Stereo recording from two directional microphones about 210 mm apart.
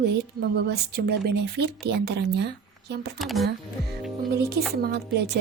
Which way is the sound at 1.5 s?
50° right (ahead or behind).